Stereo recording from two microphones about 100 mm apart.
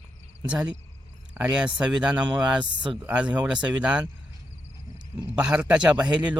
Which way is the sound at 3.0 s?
15° right (ahead or behind).